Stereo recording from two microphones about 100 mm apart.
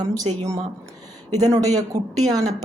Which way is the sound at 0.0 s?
35° right (ahead or behind).